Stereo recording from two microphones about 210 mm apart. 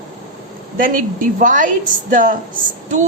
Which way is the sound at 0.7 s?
40° right (ahead or behind).